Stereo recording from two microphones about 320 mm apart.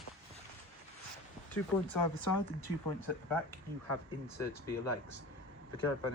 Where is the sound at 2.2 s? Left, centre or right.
Left.